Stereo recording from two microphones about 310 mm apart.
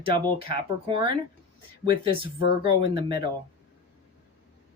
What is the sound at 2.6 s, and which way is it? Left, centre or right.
Speech, centre.